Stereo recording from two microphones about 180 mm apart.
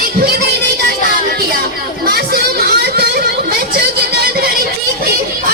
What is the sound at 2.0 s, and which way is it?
Children playing, 60° right (ahead or behind).